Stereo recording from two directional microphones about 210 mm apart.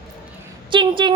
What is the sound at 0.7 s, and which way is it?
Speech, 20° right (ahead or behind).